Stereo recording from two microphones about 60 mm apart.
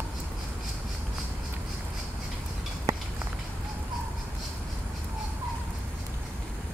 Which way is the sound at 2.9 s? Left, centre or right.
Right.